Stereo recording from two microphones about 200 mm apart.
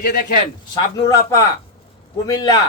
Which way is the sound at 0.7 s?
15° left (ahead or behind).